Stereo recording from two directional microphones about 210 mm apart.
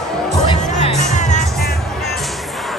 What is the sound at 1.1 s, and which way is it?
Music, 35° left (ahead or behind).